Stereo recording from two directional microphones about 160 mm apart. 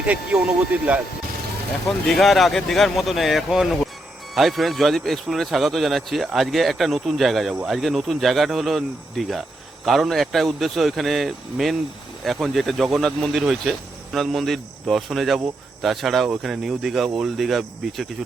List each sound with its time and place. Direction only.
0.0 s speech: 5° right (ahead or behind)